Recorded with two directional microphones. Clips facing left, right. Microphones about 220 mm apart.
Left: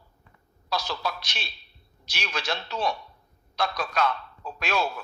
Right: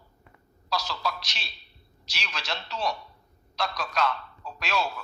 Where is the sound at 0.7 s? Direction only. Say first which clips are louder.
Left 1 dB; 55° left (ahead or behind).